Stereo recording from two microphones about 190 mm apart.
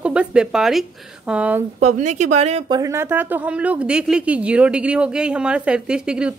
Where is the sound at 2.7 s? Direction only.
15° right (ahead or behind).